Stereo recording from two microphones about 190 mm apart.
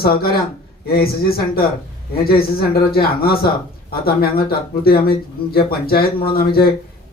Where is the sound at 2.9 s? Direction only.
55° left (ahead or behind).